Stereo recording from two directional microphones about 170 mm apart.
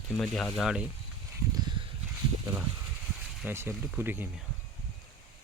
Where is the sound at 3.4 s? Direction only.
10° right (ahead or behind).